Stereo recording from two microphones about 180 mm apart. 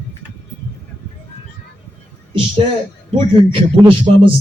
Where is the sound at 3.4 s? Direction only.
30° right (ahead or behind).